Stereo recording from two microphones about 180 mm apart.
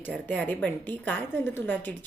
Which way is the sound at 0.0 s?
10° left (ahead or behind).